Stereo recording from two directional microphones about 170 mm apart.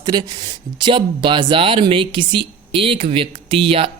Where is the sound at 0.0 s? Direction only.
25° right (ahead or behind).